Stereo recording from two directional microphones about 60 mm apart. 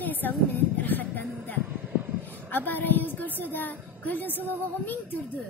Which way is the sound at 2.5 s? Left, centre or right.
Left.